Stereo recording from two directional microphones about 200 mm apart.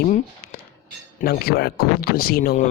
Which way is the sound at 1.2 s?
50° left (ahead or behind).